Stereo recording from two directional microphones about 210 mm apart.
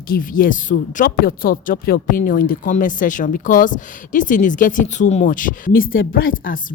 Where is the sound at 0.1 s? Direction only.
40° left (ahead or behind).